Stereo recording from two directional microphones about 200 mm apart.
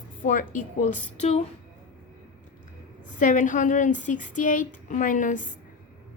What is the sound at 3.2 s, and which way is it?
Speech, 40° left (ahead or behind).